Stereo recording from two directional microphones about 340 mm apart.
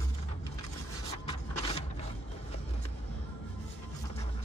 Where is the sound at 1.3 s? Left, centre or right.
Centre.